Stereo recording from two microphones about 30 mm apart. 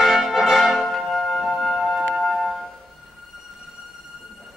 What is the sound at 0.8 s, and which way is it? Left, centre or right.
Music, centre.